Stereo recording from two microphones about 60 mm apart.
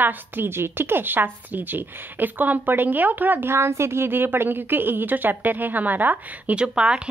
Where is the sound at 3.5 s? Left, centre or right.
Right.